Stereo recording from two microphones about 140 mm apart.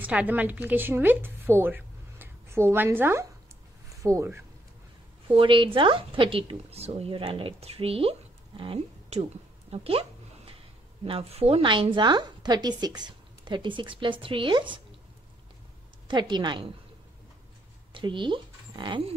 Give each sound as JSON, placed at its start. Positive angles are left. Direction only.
{"t": 0.0, "sound": "a woman's voice", "side_deg": -10}
{"t": 5.3, "sound": "speech", "side_deg": -35}
{"t": 9.7, "sound": "a sound", "side_deg": -40}
{"t": 11.1, "sound": "speech", "side_deg": -45}
{"t": 16.1, "sound": "speech", "side_deg": -35}
{"t": 17.9, "sound": "speech", "side_deg": -35}